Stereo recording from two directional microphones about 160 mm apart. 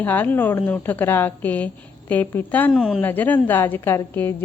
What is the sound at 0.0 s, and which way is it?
A woman's voice, 10° left (ahead or behind).